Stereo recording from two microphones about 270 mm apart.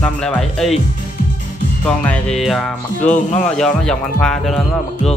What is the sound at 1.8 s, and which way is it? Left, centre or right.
Speech, centre.